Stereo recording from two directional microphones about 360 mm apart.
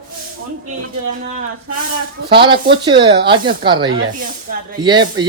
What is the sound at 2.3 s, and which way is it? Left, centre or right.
Speech, centre.